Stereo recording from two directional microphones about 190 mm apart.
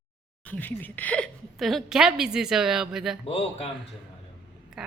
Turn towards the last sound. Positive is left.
turn(degrees=-5)  # may be behind; listen again after turning